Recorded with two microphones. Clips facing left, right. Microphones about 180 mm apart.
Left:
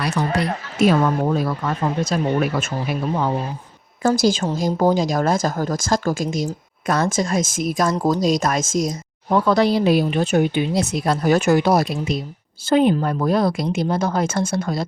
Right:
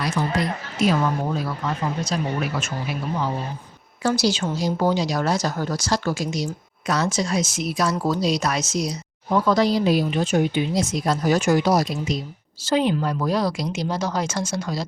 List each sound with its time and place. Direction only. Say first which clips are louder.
0.0 s a woman's voice: left 2 dB; 70° left (ahead or behind)